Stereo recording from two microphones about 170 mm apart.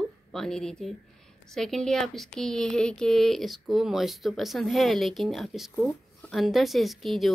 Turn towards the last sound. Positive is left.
turn(degrees=0)  # may be behind; listen again after turning